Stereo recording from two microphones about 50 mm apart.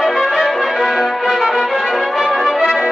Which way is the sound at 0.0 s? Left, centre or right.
Centre.